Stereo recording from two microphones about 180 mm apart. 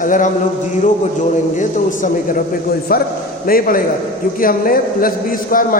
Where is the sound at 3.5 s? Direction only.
50° left (ahead or behind).